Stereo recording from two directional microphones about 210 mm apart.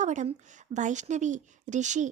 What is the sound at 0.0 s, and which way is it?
Speech, 35° right (ahead or behind).